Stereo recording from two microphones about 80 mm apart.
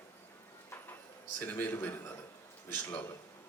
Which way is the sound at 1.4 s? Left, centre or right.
Left.